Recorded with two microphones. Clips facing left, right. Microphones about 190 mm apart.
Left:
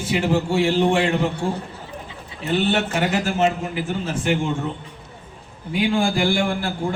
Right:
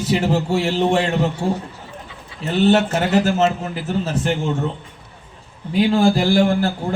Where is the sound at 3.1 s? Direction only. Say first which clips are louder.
Right 5 dB; 40° right (ahead or behind).